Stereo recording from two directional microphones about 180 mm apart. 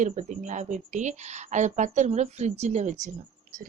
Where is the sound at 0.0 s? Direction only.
45° right (ahead or behind).